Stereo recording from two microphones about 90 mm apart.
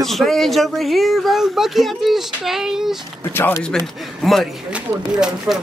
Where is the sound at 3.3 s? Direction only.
25° left (ahead or behind).